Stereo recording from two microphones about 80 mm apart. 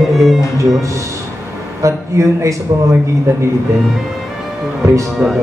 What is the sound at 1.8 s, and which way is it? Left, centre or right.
Speech, right.